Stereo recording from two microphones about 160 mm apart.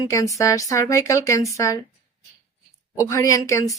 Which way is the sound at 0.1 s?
20° left (ahead or behind).